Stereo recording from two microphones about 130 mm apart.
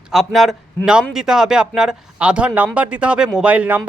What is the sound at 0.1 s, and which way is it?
A woman's voice, centre (ahead or behind).